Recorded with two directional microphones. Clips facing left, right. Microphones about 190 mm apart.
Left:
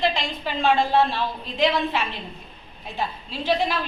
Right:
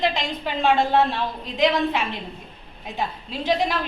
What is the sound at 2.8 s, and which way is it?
Speech, 15° right (ahead or behind).